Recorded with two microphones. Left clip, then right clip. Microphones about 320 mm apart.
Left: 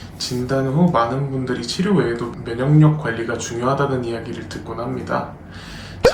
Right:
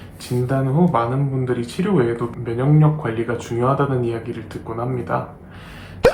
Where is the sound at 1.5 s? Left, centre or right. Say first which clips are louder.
Left 1 dB; centre.